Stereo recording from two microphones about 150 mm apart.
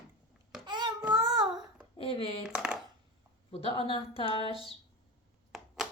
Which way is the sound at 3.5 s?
40° left (ahead or behind).